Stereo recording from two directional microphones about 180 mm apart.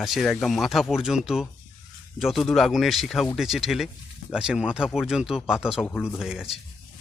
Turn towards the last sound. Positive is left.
turn(degrees=-5)  # may be behind; listen again after turning